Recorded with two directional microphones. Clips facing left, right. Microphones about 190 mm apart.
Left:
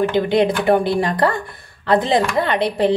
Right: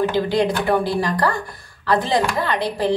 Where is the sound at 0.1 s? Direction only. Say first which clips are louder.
Left 3 dB; 20° left (ahead or behind).